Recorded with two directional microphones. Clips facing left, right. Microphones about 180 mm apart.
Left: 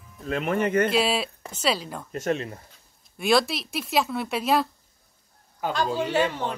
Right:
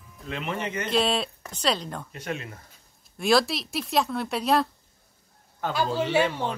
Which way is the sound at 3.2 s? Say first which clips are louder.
Even; centre (ahead or behind).